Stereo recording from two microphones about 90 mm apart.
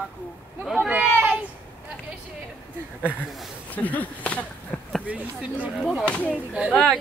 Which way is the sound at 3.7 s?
15° left (ahead or behind).